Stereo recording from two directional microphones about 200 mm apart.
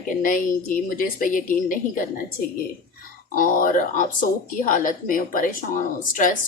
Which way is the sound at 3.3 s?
45° left (ahead or behind).